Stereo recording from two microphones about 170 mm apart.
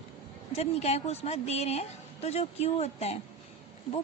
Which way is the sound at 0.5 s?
40° left (ahead or behind).